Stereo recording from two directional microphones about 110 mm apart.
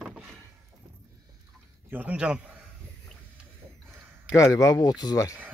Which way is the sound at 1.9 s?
15° right (ahead or behind).